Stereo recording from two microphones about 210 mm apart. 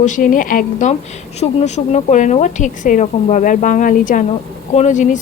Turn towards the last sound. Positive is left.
turn(degrees=35)  # may be behind; listen again after turning